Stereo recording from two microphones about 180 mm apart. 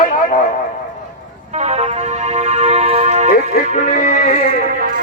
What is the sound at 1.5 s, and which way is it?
Music, 35° right (ahead or behind).